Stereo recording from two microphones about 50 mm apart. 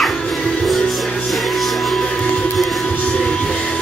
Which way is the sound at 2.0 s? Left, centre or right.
Centre.